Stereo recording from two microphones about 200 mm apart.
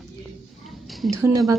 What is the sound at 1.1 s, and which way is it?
Speech, 15° right (ahead or behind).